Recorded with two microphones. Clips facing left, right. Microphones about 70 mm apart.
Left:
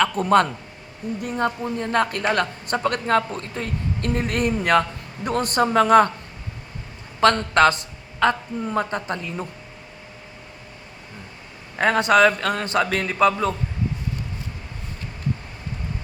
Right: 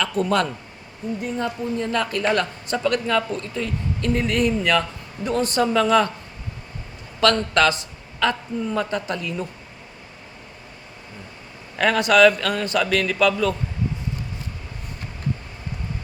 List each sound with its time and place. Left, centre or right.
0.0 s a man's voice: left
7.2 s a man's voice: left
11.8 s a man's voice: left